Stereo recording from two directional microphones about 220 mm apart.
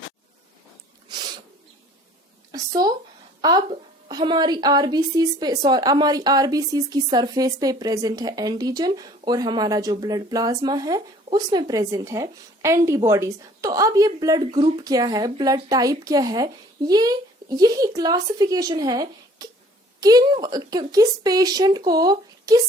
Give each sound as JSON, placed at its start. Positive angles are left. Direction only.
{"t": 2.5, "sound": "a woman's voice", "side_deg": -20}